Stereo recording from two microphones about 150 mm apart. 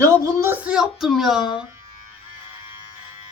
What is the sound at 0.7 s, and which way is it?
Speech, 5° right (ahead or behind).